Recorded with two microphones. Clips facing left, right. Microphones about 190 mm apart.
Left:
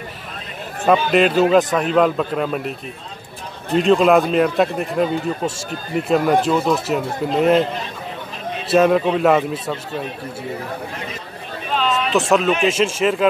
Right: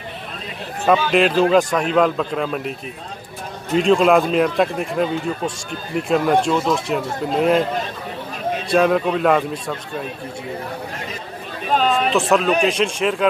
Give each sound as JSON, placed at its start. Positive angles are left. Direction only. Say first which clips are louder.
{"t": 1.1, "sound": "a man's voice", "louder": "left 1 dB", "side_deg": 5}
{"t": 3.7, "sound": "a man's voice", "louder": "left 1 dB", "side_deg": 0}
{"t": 8.6, "sound": "a man's voice", "louder": "left 2 dB", "side_deg": 0}
{"t": 11.7, "sound": "chatter", "louder": "right 3 dB", "side_deg": -45}
{"t": 12.1, "sound": "a man's voice", "louder": "left 3 dB", "side_deg": 0}